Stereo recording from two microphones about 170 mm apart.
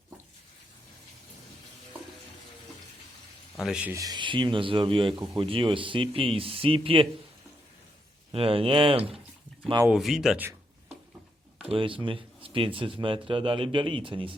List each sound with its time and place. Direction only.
3.6 s speech: 5° right (ahead or behind)
3.9 s speech: 25° right (ahead or behind)
8.3 s speech: 35° right (ahead or behind)
9.6 s speech: 20° right (ahead or behind)
9.9 s speech: 5° right (ahead or behind)
11.7 s speech: 30° right (ahead or behind)